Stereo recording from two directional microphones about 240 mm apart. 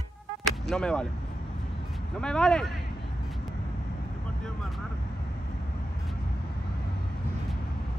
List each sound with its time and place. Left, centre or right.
0.5 s speech: centre
2.1 s speech: centre